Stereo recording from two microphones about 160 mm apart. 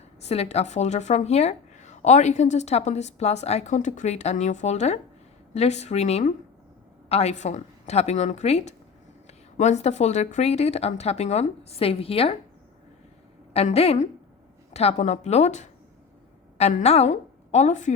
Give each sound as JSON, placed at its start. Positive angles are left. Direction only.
{"t": 0.2, "sound": "a woman's voice", "side_deg": 40}
{"t": 13.5, "sound": "a woman's voice", "side_deg": 40}